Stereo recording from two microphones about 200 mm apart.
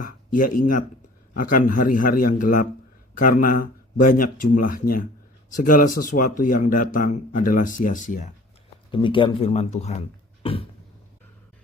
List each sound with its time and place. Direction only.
0.0 s a man's voice: 40° left (ahead or behind)
8.9 s speech: 25° left (ahead or behind)
10.4 s cough: 25° left (ahead or behind)